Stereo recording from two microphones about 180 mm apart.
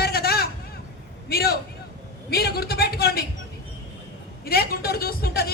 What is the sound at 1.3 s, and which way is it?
A man's voice, 60° left (ahead or behind).